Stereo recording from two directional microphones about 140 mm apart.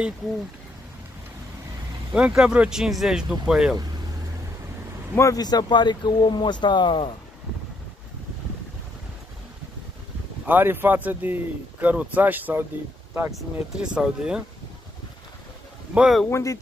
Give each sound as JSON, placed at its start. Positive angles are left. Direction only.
{"t": 2.1, "sound": "speech", "side_deg": -10}
{"t": 5.1, "sound": "speech", "side_deg": 25}
{"t": 10.4, "sound": "speech", "side_deg": -15}
{"t": 15.9, "sound": "speech", "side_deg": -5}
{"t": 16.3, "sound": "speech", "side_deg": 20}